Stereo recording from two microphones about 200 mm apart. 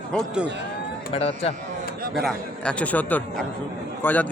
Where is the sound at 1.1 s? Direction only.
30° left (ahead or behind).